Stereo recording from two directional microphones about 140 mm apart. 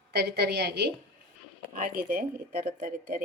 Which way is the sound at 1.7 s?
85° right.